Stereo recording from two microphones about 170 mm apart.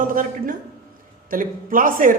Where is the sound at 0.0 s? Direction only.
55° right (ahead or behind).